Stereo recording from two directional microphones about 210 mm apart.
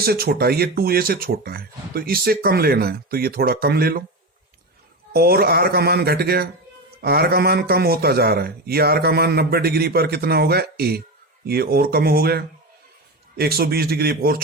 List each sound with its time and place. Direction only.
0.0 s speech: 50° right (ahead or behind)
5.1 s speech: 45° right (ahead or behind)